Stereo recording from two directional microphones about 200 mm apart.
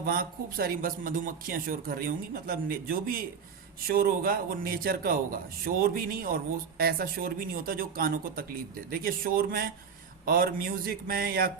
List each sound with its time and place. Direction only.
0.0 s a man's voice: 45° right (ahead or behind)